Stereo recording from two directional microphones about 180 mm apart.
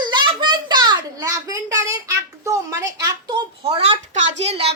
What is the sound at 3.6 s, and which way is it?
Speech, 35° right (ahead or behind).